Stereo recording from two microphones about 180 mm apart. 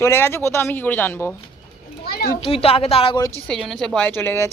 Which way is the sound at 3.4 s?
Centre (ahead or behind).